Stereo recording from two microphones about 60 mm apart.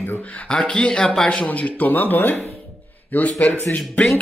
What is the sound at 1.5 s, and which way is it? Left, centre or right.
Speech, left.